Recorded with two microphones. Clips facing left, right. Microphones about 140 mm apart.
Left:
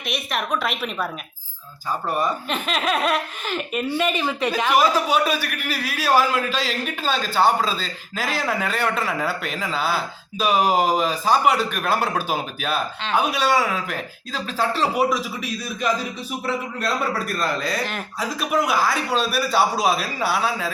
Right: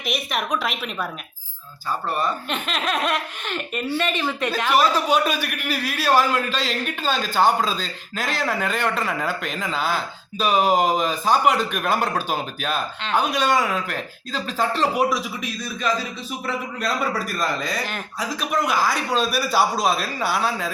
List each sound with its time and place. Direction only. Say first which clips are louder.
0.0 s a man's voice: right 1 dB; centre (ahead or behind)
2.0 s speech: left 1 dB; 10° left (ahead or behind)
2.5 s a man's voice: left 2 dB; centre (ahead or behind)
16.5 s a man's voice: left 1 dB; centre (ahead or behind)
19.7 s a man's voice: left 1 dB; 10° left (ahead or behind)